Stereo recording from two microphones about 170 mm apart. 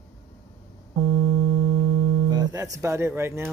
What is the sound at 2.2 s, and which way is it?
Speech, 20° right (ahead or behind).